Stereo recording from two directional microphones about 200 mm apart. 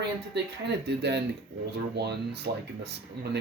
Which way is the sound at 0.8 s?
55° right (ahead or behind).